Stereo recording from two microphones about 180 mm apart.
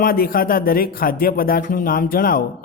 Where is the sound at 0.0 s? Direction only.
55° left (ahead or behind).